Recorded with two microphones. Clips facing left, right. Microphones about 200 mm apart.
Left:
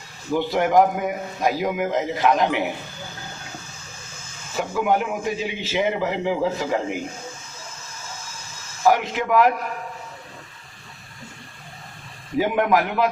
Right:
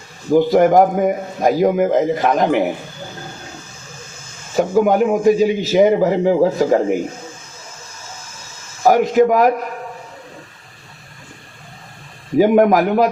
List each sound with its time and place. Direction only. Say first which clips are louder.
0.3 s a man's voice: right 9 dB; 45° right (ahead or behind)
4.5 s a man's voice: right 8 dB; 40° right (ahead or behind)
8.8 s a man's voice: right 8 dB; 40° right (ahead or behind)
12.4 s a man's voice: right 8 dB; 40° right (ahead or behind)